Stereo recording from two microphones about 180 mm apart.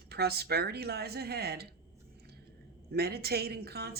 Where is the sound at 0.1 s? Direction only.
60° right (ahead or behind).